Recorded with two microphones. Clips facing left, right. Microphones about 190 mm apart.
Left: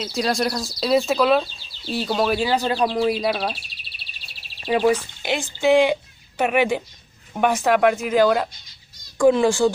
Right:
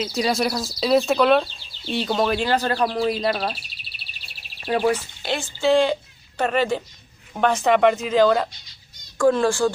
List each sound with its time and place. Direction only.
0.0 s speech: centre (ahead or behind); by 3.0 s 15° left (ahead or behind)
3.0 s speech: centre (ahead or behind)
4.6 s a woman's voice: 10° left (ahead or behind)